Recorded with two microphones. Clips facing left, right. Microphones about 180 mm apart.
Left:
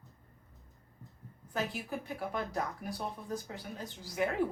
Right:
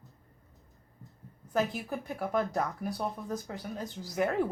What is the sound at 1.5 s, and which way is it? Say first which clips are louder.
Speech: right 5 dB; 45° right (ahead or behind).